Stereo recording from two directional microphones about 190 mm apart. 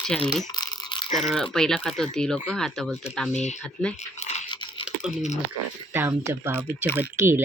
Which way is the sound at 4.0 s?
35° left (ahead or behind).